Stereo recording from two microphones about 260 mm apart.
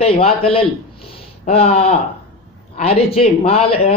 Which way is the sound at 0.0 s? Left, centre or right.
Left.